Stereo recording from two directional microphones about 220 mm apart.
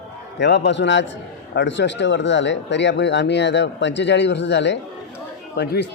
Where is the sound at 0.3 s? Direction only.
50° left (ahead or behind).